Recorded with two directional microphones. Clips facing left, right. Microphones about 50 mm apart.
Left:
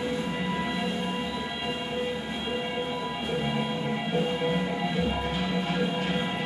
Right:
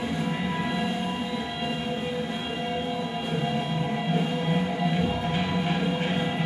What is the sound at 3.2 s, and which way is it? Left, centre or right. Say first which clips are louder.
Music: left 1 dB; centre.